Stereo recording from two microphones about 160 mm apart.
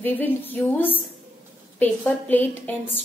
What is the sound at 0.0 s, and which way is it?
A woman's voice, 10° left (ahead or behind).